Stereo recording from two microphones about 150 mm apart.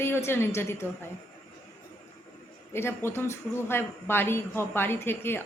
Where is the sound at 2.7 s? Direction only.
15° left (ahead or behind).